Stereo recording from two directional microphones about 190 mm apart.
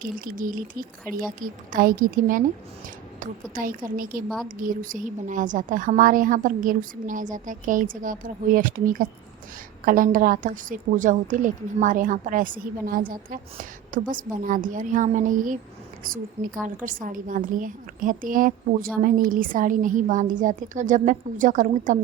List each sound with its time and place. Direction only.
0.0 s a woman's voice: 45° right (ahead or behind)
3.5 s a woman's voice: 45° right (ahead or behind)
16.6 s a woman's voice: 45° right (ahead or behind)